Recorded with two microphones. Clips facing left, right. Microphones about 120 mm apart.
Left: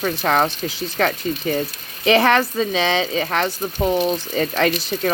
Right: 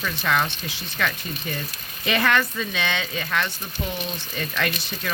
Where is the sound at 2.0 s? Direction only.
30° left (ahead or behind).